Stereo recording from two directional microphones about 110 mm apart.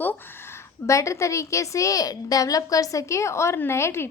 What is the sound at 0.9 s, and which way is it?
A woman's voice, 30° left (ahead or behind).